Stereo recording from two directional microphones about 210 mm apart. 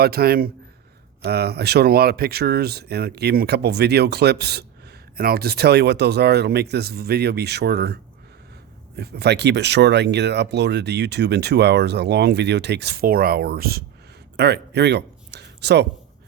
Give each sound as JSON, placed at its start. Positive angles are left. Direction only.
{"t": 0.0, "sound": "speech", "side_deg": -45}
{"t": 9.0, "sound": "speech", "side_deg": -50}